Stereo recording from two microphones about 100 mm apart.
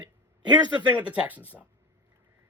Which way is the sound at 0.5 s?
45° right (ahead or behind).